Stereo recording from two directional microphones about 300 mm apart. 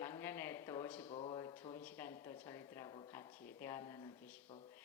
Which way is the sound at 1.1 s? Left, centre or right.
Centre.